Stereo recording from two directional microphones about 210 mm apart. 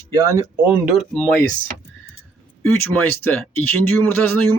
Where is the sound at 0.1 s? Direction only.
15° right (ahead or behind).